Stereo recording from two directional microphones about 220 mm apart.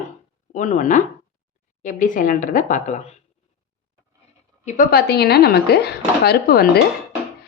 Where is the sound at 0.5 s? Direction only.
35° left (ahead or behind).